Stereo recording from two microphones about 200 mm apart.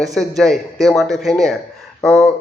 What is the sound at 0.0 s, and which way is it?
Speech, centre (ahead or behind).